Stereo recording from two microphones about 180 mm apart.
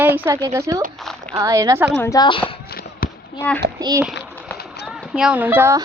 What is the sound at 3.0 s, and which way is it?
Firecracker, 55° left (ahead or behind).